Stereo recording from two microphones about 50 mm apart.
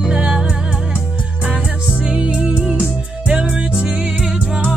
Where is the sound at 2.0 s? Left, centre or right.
Centre.